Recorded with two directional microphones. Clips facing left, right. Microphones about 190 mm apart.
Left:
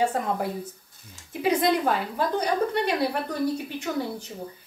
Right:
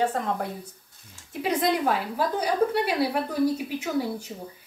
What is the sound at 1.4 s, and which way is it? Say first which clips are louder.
A woman's voice: left 2 dB; centre (ahead or behind).